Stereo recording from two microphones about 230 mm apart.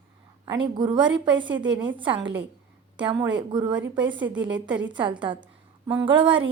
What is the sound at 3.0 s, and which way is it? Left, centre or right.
Speech, centre.